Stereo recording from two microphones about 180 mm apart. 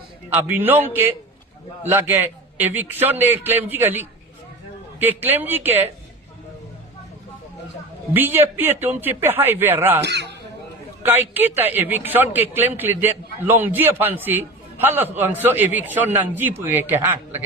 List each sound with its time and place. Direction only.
0.3 s a man's voice: 10° right (ahead or behind)
8.1 s a man's voice: 10° right (ahead or behind)
10.0 s speech: 70° right (ahead or behind)
11.0 s a man's voice: 10° right (ahead or behind)